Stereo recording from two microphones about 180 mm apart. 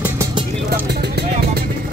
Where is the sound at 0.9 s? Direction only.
65° right (ahead or behind).